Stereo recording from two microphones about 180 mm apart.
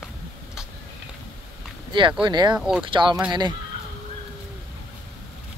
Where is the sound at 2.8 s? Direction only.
25° right (ahead or behind).